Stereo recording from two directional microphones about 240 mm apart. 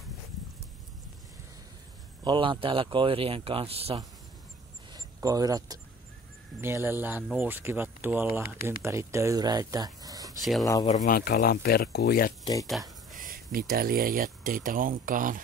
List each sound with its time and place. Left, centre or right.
2.2 s speech: right
4.9 s a sound: centre
6.6 s speech: centre
10.4 s speech: centre
10.9 s speech: left
13.2 s speech: right